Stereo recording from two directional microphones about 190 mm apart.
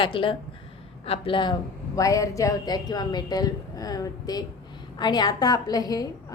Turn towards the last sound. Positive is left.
turn(degrees=20)  # may be behind; listen again after turning